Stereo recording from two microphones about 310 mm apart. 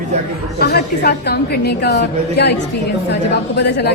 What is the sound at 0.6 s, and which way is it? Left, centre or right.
A woman's voice, left.